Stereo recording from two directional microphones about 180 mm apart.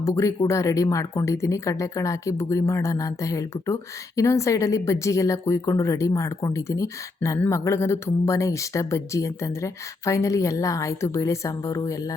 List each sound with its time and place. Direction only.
0.0 s speech: 15° left (ahead or behind)